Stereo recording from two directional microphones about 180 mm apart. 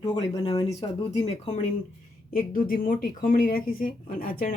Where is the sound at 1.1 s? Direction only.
35° left (ahead or behind).